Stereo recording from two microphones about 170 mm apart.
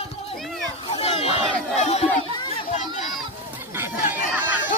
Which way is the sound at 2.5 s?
45° left (ahead or behind).